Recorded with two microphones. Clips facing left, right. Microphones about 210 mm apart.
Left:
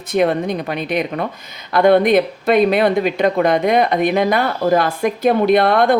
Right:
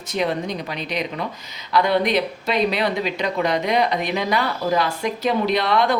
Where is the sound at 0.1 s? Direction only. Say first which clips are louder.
Left 7 dB; 55° left (ahead or behind).